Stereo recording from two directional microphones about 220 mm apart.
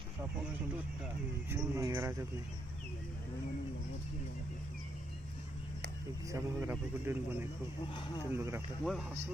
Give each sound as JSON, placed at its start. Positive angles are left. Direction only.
{"t": 1.5, "sound": "a man's voice", "side_deg": -15}
{"t": 6.2, "sound": "a man's voice", "side_deg": -15}
{"t": 7.9, "sound": "speech", "side_deg": 20}
{"t": 8.3, "sound": "a man's voice", "side_deg": -10}
{"t": 8.8, "sound": "speech", "side_deg": 0}